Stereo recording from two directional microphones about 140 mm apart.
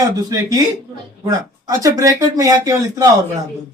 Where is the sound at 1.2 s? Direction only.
25° right (ahead or behind).